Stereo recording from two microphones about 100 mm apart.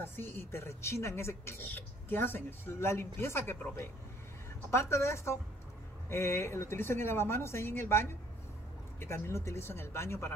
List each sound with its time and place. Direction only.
0.0 s speech: 20° left (ahead or behind)